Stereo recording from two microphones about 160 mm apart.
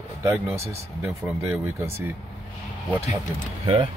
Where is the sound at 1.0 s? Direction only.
15° right (ahead or behind).